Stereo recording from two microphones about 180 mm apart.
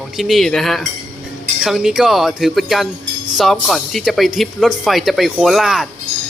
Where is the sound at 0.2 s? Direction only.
Centre (ahead or behind).